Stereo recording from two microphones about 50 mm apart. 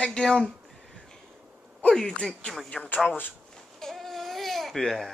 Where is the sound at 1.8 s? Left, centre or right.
Centre.